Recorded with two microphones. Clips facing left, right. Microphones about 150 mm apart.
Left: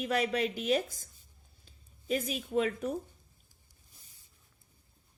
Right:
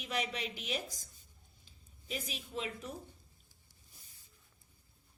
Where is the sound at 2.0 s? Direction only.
50° left (ahead or behind).